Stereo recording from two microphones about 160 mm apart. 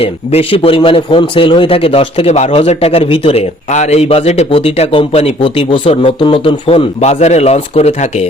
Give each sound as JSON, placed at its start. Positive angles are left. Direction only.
{"t": 0.0, "sound": "a man's voice", "side_deg": 40}